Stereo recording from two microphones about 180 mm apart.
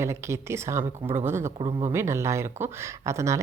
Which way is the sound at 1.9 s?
15° right (ahead or behind).